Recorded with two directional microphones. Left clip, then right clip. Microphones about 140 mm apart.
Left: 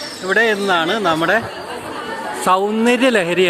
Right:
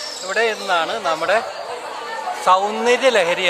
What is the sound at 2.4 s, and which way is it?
Speech, 30° left (ahead or behind).